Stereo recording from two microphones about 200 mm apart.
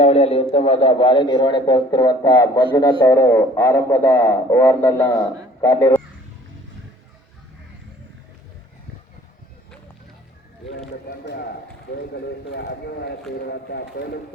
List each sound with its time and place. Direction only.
0.0 s a man's voice: 30° left (ahead or behind); by 6.0 s 10° left (ahead or behind)
12.1 s a man's voice: 55° left (ahead or behind)